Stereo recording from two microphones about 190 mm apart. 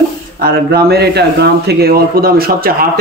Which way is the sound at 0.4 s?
55° right (ahead or behind).